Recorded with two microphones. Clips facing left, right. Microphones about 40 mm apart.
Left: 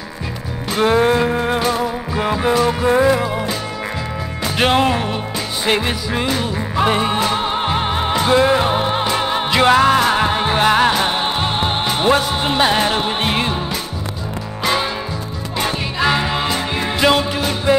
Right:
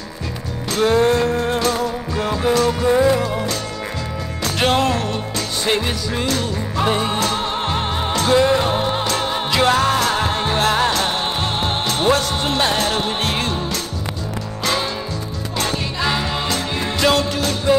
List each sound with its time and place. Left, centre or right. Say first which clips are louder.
0.7 s music: left 1 dB; centre
4.6 s music: left 2 dB; centre
14.6 s music: left 3 dB; centre